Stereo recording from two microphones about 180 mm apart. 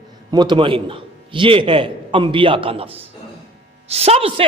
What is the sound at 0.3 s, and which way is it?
A woman's voice, 25° right (ahead or behind).